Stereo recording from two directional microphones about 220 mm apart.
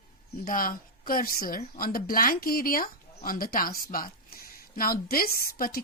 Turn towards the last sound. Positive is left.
turn(degrees=40)  # may be behind; listen again after turning